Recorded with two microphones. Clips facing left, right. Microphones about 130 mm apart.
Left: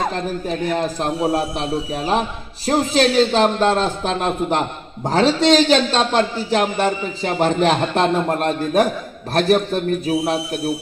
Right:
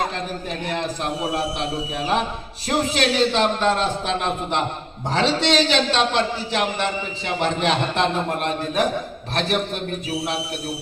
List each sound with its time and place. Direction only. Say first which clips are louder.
0.7 s a man's voice: left 2 dB; 40° left (ahead or behind)